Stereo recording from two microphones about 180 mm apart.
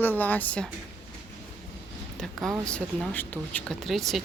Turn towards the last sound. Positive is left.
turn(degrees=0)  # may be behind; listen again after turning